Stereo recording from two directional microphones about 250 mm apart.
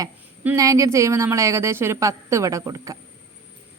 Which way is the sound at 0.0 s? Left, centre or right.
Centre.